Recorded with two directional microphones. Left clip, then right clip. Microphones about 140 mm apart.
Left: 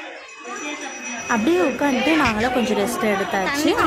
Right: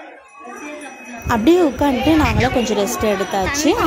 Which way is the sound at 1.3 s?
15° right (ahead or behind).